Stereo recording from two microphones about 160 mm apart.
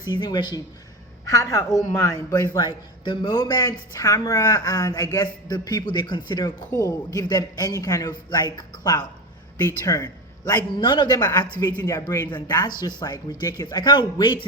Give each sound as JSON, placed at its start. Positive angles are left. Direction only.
{"t": 0.1, "sound": "speech", "side_deg": 30}